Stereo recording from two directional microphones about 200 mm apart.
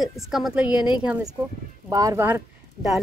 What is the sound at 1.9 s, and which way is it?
Speech, 15° right (ahead or behind).